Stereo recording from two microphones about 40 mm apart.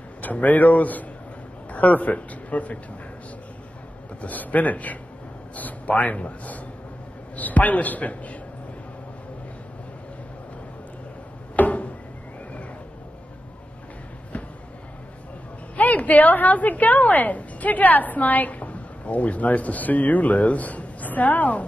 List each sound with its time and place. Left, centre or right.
0.2 s a man's voice: left
4.2 s a man's voice: left
11.5 s a sound: left
15.7 s a woman's voice: left